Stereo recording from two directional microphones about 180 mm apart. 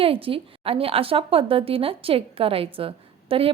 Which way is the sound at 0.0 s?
30° right (ahead or behind).